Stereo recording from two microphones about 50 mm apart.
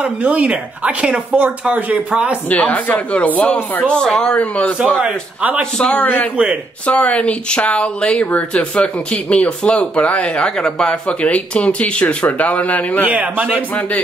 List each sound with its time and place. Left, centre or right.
0.0 s speech: right
2.5 s speech: left
3.9 s speech: centre
4.4 s speech: left
5.0 s a man's voice: right
5.9 s speech: left
13.1 s a man's voice: right
13.7 s speech: left